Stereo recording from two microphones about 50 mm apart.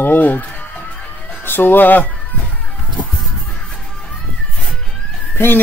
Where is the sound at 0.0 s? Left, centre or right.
Left.